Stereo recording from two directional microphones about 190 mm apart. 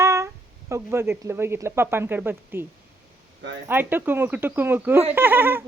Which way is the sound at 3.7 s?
10° right (ahead or behind).